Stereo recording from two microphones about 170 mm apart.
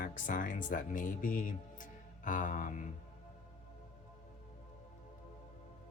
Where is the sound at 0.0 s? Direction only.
50° left (ahead or behind).